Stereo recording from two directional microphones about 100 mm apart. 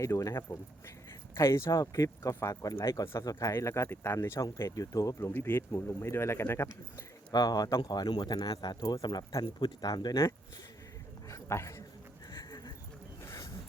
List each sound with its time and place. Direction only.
0.0 s speech: 30° left (ahead or behind)
5.3 s speech: 25° left (ahead or behind)
7.3 s speech: 40° left (ahead or behind)
11.3 s dog: 30° left (ahead or behind)
12.3 s a sound: 40° left (ahead or behind)
13.2 s a sound: 30° left (ahead or behind)